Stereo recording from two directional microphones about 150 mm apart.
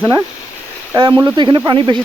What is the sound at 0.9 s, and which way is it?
Speech, 25° right (ahead or behind).